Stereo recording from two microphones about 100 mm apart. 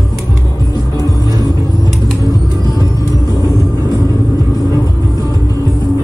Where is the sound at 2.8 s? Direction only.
35° left (ahead or behind).